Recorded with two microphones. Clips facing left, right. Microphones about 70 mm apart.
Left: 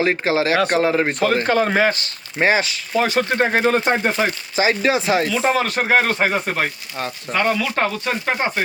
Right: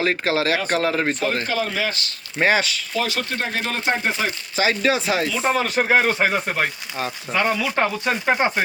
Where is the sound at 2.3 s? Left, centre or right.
Centre.